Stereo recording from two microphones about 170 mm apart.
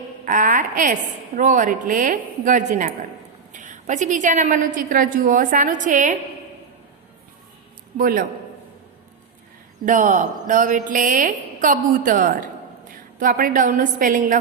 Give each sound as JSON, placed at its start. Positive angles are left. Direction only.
{"t": 0.3, "sound": "a woman's voice", "side_deg": -50}
{"t": 7.9, "sound": "a man's voice", "side_deg": -55}
{"t": 9.8, "sound": "a woman's voice", "side_deg": -50}